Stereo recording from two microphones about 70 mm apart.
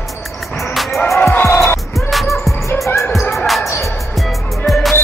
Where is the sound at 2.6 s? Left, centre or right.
Left.